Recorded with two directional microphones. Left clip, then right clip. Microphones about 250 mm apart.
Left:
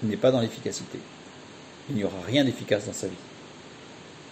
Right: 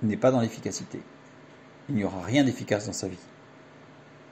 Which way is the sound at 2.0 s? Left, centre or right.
Right.